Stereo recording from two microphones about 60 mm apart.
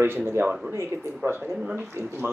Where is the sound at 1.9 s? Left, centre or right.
Right.